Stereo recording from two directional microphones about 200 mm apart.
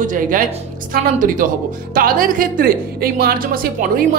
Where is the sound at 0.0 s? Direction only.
40° right (ahead or behind).